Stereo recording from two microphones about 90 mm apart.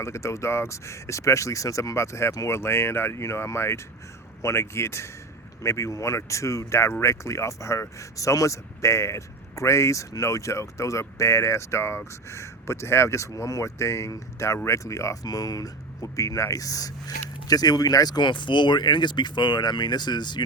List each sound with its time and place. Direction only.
0.0 s speech: 30° left (ahead or behind); by 20.4 s 55° left (ahead or behind)